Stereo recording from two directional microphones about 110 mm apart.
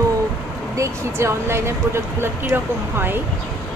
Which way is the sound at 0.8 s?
25° right (ahead or behind).